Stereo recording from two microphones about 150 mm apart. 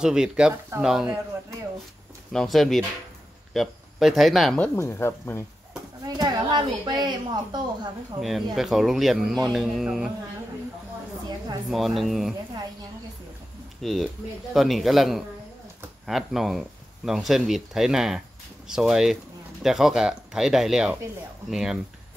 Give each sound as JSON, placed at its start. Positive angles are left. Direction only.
{"t": 0.0, "sound": "speech", "side_deg": -5}
{"t": 2.3, "sound": "speech", "side_deg": 0}
{"t": 4.7, "sound": "speech", "side_deg": 15}
{"t": 6.0, "sound": "a woman's voice", "side_deg": -30}
{"t": 8.2, "sound": "speech", "side_deg": 0}
{"t": 11.7, "sound": "speech", "side_deg": 0}
{"t": 13.7, "sound": "speech", "side_deg": 0}